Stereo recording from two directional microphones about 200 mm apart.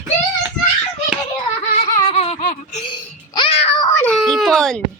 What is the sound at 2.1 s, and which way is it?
Baby laughter, 30° left (ahead or behind).